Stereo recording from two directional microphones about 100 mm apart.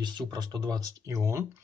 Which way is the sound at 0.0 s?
45° right (ahead or behind).